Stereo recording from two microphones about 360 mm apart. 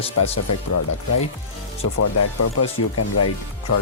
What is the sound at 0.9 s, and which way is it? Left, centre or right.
Speech, left.